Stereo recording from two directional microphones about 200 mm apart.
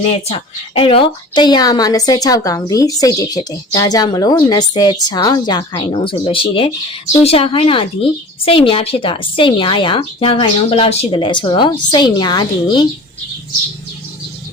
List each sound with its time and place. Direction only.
0.1 s a woman's voice: 25° left (ahead or behind)